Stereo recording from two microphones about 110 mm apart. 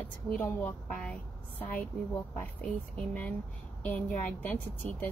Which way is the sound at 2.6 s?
15° left (ahead or behind).